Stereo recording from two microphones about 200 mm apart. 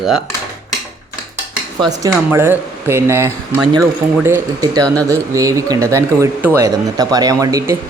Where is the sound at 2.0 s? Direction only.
15° right (ahead or behind).